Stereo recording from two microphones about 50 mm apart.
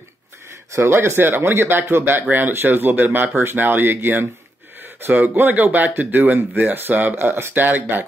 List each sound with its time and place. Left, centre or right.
0.7 s speech: right
7.2 s speech: right